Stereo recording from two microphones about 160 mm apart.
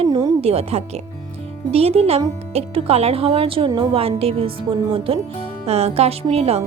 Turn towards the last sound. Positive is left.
turn(degrees=-40)  # may be behind; listen again after turning